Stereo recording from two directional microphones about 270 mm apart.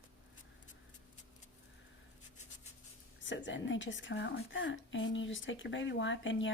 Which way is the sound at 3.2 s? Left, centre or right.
Left.